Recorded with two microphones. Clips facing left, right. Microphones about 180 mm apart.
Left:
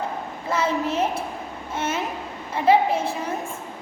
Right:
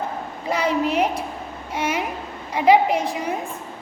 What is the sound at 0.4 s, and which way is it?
Speech, 15° right (ahead or behind).